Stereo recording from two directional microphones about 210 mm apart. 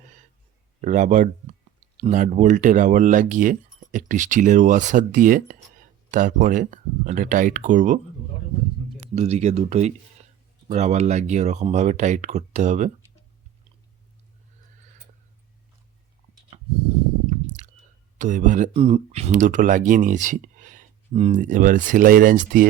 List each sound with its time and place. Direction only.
0.8 s speech: 35° right (ahead or behind)
9.0 s speech: 30° right (ahead or behind)
18.2 s speech: 35° right (ahead or behind)